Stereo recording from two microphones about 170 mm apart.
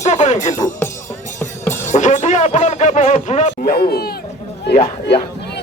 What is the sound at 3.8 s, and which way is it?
Speech, 65° left (ahead or behind).